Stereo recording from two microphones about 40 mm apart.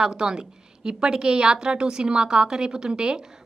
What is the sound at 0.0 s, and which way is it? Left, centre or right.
A woman's voice, centre.